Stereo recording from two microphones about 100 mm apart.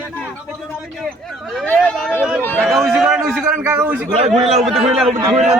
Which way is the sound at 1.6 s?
15° left (ahead or behind).